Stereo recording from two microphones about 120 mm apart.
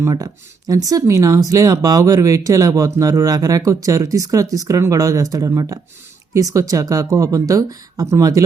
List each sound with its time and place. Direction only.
0.0 s speech: 30° right (ahead or behind)